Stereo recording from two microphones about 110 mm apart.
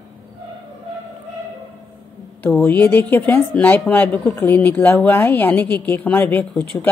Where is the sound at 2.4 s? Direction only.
15° left (ahead or behind).